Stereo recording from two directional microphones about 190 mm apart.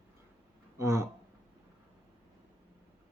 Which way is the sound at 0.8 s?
15° right (ahead or behind).